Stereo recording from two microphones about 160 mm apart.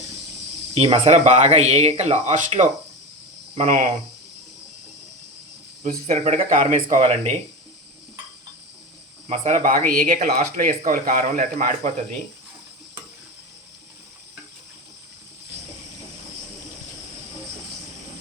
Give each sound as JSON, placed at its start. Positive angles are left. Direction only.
{"t": 0.7, "sound": "speech", "side_deg": -40}
{"t": 6.1, "sound": "speech", "side_deg": -45}
{"t": 9.3, "sound": "speech", "side_deg": -40}
{"t": 9.6, "sound": "speech", "side_deg": -60}
{"t": 10.1, "sound": "speech", "side_deg": -70}
{"t": 10.3, "sound": "speech", "side_deg": -55}